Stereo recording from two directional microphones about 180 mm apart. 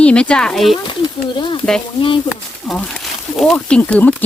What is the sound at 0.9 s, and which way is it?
Speech, 25° left (ahead or behind).